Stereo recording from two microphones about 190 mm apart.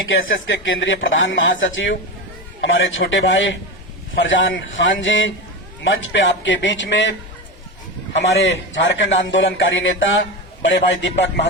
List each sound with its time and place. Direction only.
0.0 s a man's voice: 90° left; by 7.1 s 75° left (ahead or behind)
8.2 s a man's voice: 75° left (ahead or behind)